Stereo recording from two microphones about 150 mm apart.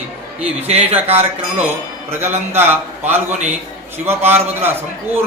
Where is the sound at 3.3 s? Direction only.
50° right (ahead or behind).